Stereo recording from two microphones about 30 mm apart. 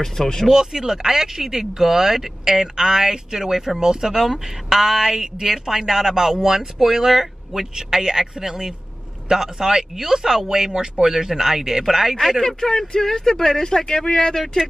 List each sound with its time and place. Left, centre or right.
0.0 s speech: centre
0.5 s speech: centre
12.4 s speech: centre